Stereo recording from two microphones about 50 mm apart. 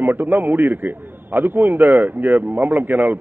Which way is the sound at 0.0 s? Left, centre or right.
Right.